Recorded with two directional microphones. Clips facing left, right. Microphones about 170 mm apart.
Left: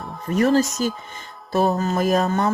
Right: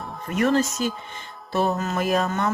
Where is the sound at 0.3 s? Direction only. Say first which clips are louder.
Left 3 dB; 35° left (ahead or behind).